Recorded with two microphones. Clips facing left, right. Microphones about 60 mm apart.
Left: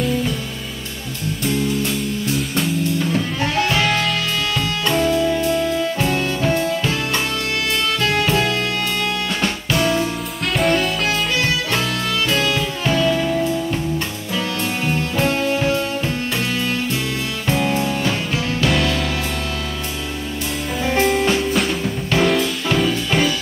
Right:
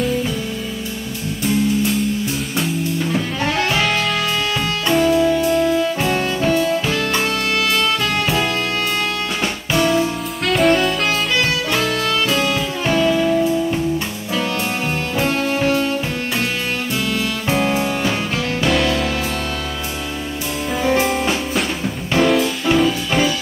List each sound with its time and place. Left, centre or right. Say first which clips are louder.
1.4 s music: right 3 dB; centre
3.8 s music: right 1 dB; centre
9.4 s music: right 2 dB; centre
12.5 s music: right 1 dB; centre
13.1 s music: right 3 dB; centre
17.5 s music: even; centre
18.7 s music: right 3 dB; centre
20.8 s music: even; centre